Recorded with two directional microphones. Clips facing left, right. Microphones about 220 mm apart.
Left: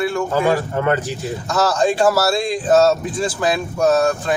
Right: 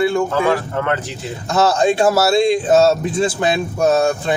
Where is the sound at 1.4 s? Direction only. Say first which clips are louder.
Right 3 dB; 25° right (ahead or behind).